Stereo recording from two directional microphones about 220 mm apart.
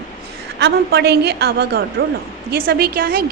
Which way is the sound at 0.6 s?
45° right (ahead or behind).